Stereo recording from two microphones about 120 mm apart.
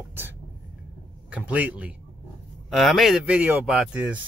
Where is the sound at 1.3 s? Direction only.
15° right (ahead or behind).